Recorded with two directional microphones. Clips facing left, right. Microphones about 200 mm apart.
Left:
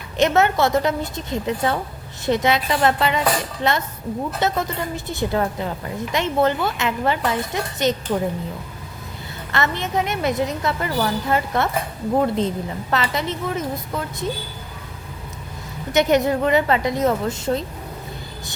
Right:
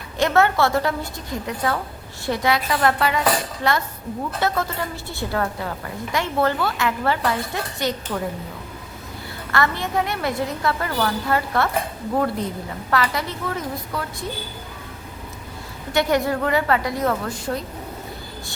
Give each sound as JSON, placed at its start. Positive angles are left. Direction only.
{"t": 0.2, "sound": "a woman's voice", "side_deg": 20}
{"t": 9.5, "sound": "a woman's voice", "side_deg": 20}
{"t": 15.9, "sound": "a woman's voice", "side_deg": 20}